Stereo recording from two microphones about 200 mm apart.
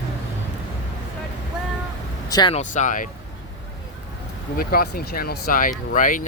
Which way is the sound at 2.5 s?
35° left (ahead or behind).